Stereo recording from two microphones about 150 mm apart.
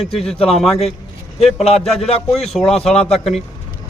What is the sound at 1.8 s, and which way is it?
A man's voice, centre (ahead or behind).